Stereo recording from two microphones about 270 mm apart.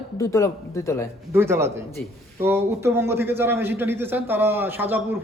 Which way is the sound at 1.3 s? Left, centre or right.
Centre.